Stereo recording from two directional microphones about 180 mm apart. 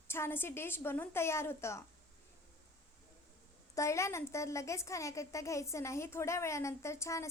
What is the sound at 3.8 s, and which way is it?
A woman's voice, 15° left (ahead or behind).